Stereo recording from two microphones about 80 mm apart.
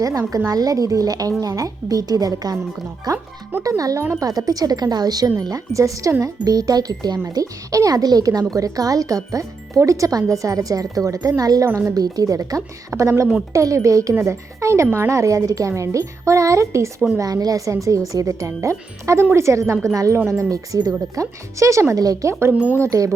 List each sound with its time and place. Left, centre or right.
0.0 s speech: right
21.9 s speech: right
22.3 s speech: right